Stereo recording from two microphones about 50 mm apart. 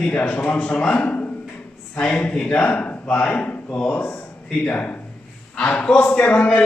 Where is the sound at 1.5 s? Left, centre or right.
Left.